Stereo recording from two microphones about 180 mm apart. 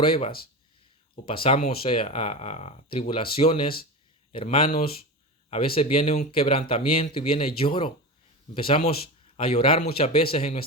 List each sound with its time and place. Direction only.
0.0 s speech: 30° left (ahead or behind)